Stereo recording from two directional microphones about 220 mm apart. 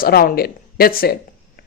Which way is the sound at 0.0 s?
40° left (ahead or behind).